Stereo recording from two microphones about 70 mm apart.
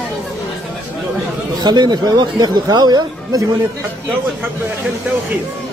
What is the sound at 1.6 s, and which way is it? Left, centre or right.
Speech, right.